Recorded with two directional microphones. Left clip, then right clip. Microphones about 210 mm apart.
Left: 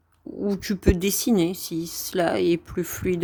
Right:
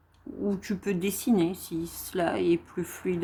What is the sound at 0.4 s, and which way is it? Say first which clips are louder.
Speech: left 7 dB; 35° left (ahead or behind).